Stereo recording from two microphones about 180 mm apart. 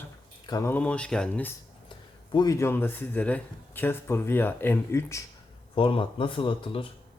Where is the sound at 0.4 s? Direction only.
20° left (ahead or behind).